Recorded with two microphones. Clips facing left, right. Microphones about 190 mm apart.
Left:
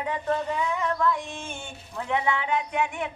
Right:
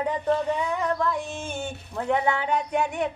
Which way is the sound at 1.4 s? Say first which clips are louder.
Right 6 dB; 35° right (ahead or behind).